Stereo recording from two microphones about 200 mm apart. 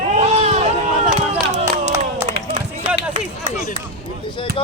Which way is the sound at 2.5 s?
35° right (ahead or behind).